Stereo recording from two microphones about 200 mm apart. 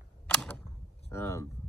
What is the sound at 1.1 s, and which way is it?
Speech, 15° left (ahead or behind).